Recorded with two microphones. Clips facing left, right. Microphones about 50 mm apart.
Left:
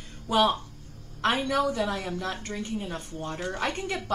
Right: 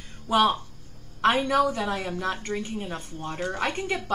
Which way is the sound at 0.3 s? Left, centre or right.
Centre.